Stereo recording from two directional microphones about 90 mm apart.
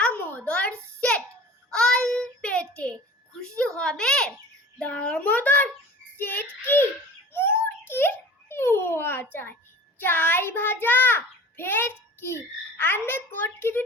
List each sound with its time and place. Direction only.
0.0 s a sound: 15° left (ahead or behind)
1.7 s child singing: 10° left (ahead or behind)
3.5 s a sound: 10° left (ahead or behind)
4.8 s a child's voice: 15° left (ahead or behind)
6.1 s child singing: 20° left (ahead or behind)
7.3 s babbling: 25° left (ahead or behind)
10.0 s child singing: 20° left (ahead or behind)